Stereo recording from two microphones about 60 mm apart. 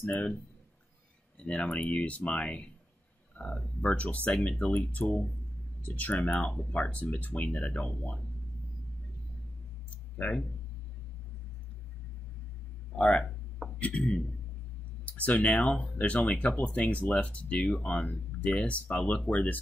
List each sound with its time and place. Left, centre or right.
0.1 s speech: left
1.4 s speech: centre
10.2 s speech: left
12.9 s speech: left